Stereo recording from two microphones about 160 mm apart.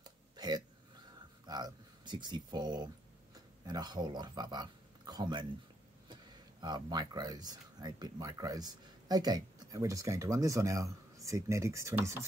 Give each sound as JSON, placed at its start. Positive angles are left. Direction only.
{"t": 0.4, "sound": "hiccup", "side_deg": -25}
{"t": 1.4, "sound": "a sound", "side_deg": -25}
{"t": 3.3, "sound": "speech", "side_deg": -25}